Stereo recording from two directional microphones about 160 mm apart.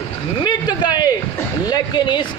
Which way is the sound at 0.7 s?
25° left (ahead or behind).